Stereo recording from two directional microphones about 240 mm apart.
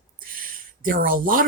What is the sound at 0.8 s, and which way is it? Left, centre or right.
Speech, right.